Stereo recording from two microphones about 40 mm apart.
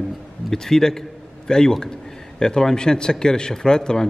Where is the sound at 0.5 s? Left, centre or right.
Centre.